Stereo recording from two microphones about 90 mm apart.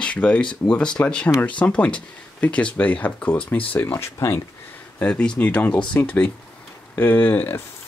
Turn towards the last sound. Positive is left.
turn(degrees=20)  # may be behind; listen again after turning